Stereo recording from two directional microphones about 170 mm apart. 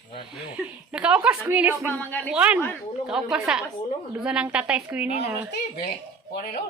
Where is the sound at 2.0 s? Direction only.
10° left (ahead or behind).